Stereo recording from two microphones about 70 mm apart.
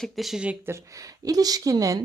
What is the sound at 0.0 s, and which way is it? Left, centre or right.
Speech, centre.